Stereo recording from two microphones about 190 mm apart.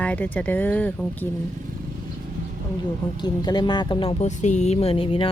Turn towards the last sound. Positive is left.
turn(degrees=30)  # may be behind; listen again after turning